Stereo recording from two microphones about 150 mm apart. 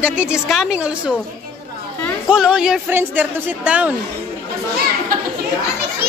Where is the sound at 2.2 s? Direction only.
5° right (ahead or behind).